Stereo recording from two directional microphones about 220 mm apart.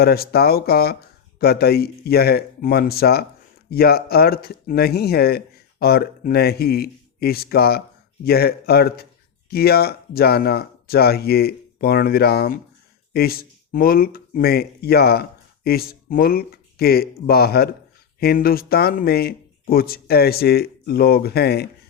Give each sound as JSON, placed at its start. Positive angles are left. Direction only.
{"t": 0.0, "sound": "speech", "side_deg": 45}